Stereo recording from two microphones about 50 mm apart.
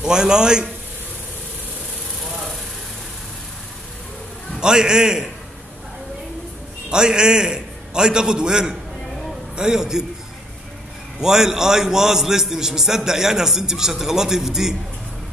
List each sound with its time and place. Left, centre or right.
0.0 s a man's voice: centre
4.6 s a man's voice: centre
6.9 s a man's voice: centre
11.1 s a man's voice: centre